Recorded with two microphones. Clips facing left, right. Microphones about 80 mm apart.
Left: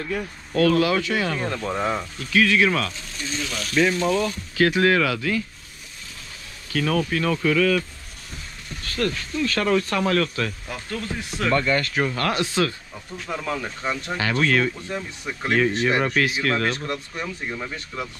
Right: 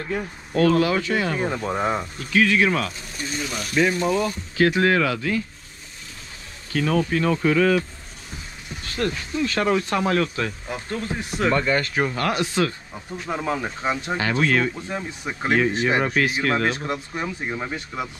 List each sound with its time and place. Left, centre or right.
0.0 s speech: centre
6.7 s speech: right